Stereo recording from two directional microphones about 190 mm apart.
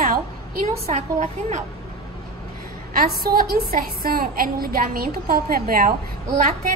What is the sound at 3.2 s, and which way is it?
A woman's voice, 50° right (ahead or behind).